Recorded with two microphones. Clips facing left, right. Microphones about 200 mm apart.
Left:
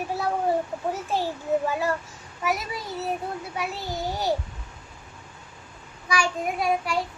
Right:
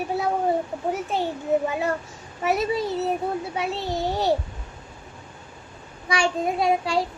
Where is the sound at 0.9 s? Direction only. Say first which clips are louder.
Right 3 dB; 20° right (ahead or behind).